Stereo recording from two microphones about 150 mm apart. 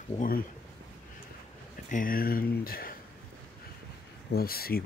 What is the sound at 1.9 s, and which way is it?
Speech, 70° left (ahead or behind).